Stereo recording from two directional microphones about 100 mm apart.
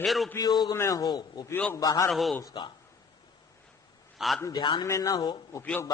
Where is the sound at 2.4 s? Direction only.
45° left (ahead or behind).